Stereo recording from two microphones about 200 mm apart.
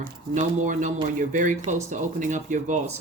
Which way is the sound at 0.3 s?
40° right (ahead or behind).